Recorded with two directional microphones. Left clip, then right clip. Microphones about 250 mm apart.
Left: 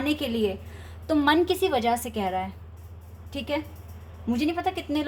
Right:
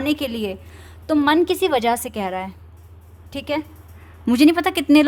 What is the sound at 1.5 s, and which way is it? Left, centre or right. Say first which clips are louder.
Speech: right 5 dB; right.